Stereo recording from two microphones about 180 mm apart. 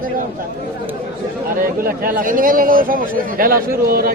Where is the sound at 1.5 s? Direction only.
50° right (ahead or behind).